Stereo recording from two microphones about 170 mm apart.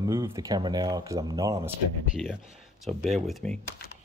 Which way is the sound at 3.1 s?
Centre (ahead or behind).